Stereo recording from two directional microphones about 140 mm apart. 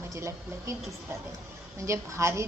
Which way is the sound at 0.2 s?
20° right (ahead or behind).